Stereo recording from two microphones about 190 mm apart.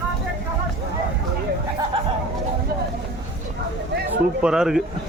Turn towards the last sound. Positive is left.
turn(degrees=-5)  # may be behind; listen again after turning